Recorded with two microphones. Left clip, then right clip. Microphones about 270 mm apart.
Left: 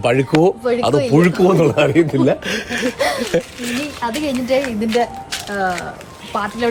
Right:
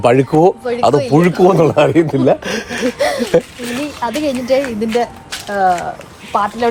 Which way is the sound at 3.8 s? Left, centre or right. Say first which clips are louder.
Right 5 dB; centre.